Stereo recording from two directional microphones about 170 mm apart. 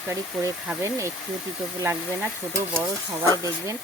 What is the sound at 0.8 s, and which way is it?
Speech, 15° right (ahead or behind).